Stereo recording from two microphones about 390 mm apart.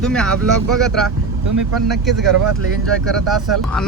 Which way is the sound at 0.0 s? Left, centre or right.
Centre.